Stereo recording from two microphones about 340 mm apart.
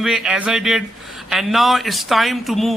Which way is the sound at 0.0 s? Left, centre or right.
Centre.